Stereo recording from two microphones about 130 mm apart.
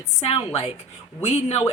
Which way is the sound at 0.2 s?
50° left (ahead or behind).